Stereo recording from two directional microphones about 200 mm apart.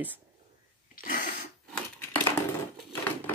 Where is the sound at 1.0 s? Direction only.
40° left (ahead or behind).